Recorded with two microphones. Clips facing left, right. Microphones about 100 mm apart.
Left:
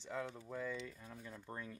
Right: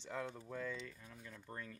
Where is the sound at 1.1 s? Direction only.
25° left (ahead or behind).